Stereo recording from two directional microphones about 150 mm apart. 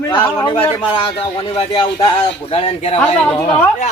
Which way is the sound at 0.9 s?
35° left (ahead or behind).